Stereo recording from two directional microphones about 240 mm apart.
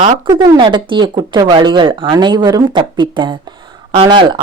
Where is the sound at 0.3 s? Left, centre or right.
Centre.